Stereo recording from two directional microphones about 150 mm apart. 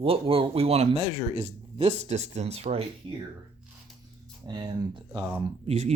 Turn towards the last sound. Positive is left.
turn(degrees=-45)  # may be behind; listen again after turning